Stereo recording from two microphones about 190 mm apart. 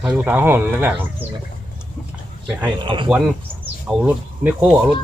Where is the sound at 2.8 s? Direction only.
25° right (ahead or behind).